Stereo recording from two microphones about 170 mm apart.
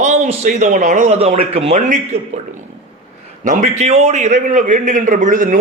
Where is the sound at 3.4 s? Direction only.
45° right (ahead or behind).